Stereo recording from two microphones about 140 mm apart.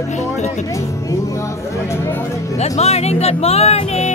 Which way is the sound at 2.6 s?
50° left (ahead or behind).